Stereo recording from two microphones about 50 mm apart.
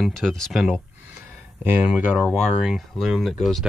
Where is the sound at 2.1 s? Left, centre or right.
Right.